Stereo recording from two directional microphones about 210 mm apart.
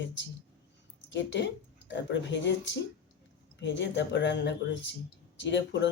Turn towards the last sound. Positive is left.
turn(degrees=60)  # may be behind; listen again after turning